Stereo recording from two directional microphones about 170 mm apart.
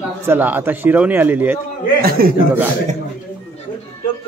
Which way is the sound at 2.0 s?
60° right (ahead or behind).